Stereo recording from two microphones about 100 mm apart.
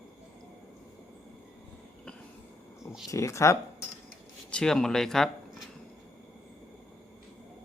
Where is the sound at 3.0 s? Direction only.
30° left (ahead or behind).